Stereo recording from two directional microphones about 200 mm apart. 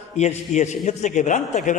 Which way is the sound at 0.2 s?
35° left (ahead or behind).